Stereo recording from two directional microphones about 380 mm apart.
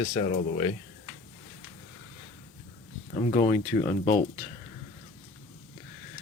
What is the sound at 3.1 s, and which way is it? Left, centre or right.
Speech, centre.